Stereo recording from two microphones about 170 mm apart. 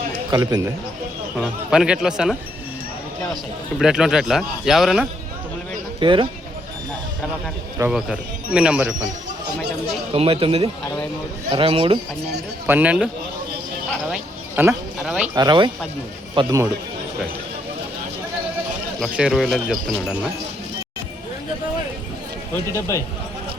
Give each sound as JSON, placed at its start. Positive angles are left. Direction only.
{"t": 0.3, "sound": "speech", "side_deg": -20}
{"t": 1.4, "sound": "speech", "side_deg": -5}
{"t": 3.8, "sound": "speech", "side_deg": -5}
{"t": 6.0, "sound": "speech", "side_deg": -30}
{"t": 7.8, "sound": "speech", "side_deg": -5}
{"t": 10.1, "sound": "speech", "side_deg": -35}
{"t": 12.6, "sound": "speech", "side_deg": -10}
{"t": 14.1, "sound": "speech", "side_deg": -10}
{"t": 15.4, "sound": "speech", "side_deg": -25}
{"t": 18.9, "sound": "speech", "side_deg": -5}
{"t": 22.9, "sound": "speech", "side_deg": 20}